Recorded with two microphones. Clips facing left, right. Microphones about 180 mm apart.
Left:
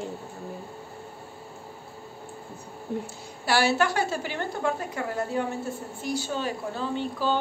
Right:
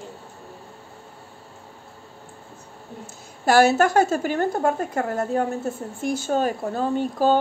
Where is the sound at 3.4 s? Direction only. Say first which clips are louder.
Right 7 dB; 45° right (ahead or behind).